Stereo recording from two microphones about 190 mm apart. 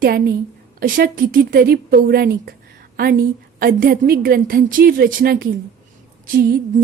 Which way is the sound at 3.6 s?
50° right (ahead or behind).